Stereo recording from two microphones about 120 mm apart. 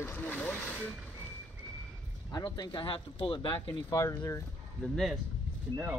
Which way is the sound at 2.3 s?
35° left (ahead or behind).